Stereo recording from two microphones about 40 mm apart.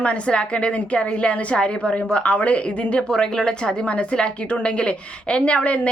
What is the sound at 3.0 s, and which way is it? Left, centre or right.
A woman's voice, centre.